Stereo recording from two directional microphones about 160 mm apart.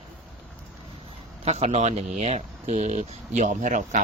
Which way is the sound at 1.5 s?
45° right (ahead or behind).